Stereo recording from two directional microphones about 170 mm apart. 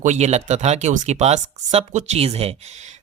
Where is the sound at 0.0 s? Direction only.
40° right (ahead or behind).